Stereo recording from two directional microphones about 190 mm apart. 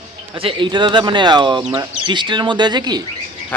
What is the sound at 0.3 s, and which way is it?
Speech, 25° right (ahead or behind).